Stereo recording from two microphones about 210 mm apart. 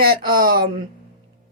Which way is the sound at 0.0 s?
45° right (ahead or behind).